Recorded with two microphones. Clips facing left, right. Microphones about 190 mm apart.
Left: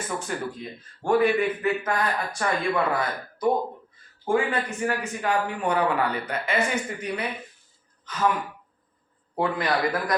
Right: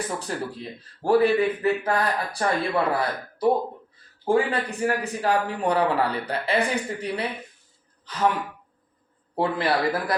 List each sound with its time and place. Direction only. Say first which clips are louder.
0.0 s a man's voice: right 1 dB; 35° right (ahead or behind)
9.3 s a man's voice: right 1 dB; 30° right (ahead or behind)